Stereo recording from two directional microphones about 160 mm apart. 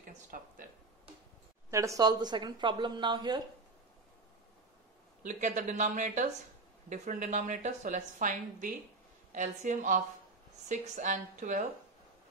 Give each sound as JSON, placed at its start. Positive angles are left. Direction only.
{"t": 0.0, "sound": "speech", "side_deg": -60}
{"t": 1.7, "sound": "speech", "side_deg": -20}
{"t": 5.2, "sound": "a woman's voice", "side_deg": -50}